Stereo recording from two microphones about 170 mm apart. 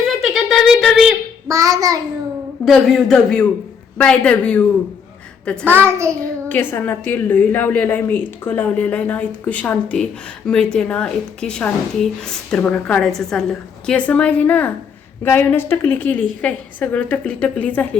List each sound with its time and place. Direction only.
0.0 s a sound: centre (ahead or behind)
1.5 s child singing: 20° right (ahead or behind)
2.6 s a man's voice: centre (ahead or behind)
5.6 s a child's voice: 15° right (ahead or behind)
6.5 s a woman's voice: 10° left (ahead or behind)